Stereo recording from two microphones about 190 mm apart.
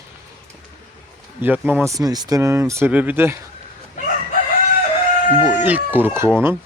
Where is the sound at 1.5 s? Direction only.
10° right (ahead or behind).